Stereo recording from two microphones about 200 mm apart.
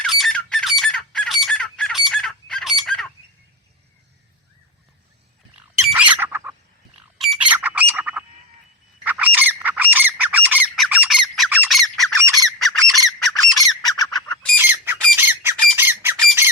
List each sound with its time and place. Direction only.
0.0 s squawk: centre (ahead or behind)
5.5 s bird: 5° right (ahead or behind)
9.0 s squawk: 10° right (ahead or behind)
13.6 s bird: 20° left (ahead or behind)
14.6 s squawk: 10° right (ahead or behind)